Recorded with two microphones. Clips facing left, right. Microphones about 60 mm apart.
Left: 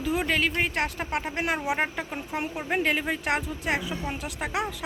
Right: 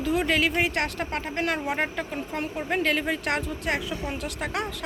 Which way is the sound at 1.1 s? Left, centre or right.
Centre.